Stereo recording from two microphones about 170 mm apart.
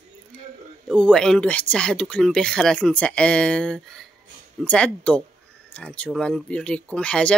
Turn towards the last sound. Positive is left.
turn(degrees=5)  # may be behind; listen again after turning